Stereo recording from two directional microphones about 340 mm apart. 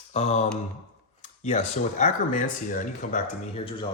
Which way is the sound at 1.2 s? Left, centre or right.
Centre.